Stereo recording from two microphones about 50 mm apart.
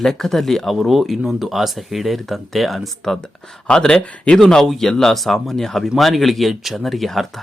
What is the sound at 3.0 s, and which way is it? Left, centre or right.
Speech, centre.